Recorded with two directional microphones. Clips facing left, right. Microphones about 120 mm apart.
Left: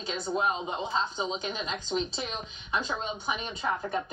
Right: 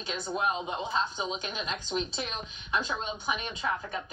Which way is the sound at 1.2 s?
30° left (ahead or behind).